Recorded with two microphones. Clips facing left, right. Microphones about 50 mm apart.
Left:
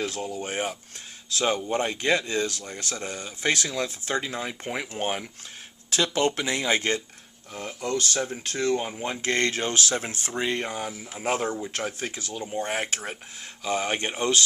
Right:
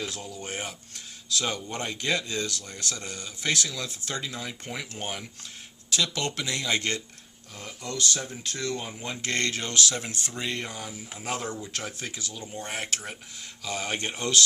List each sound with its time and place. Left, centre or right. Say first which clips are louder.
0.0 s speech: left 6 dB; left
0.4 s speech: left 6 dB; centre
7.5 s speech: left 7 dB; left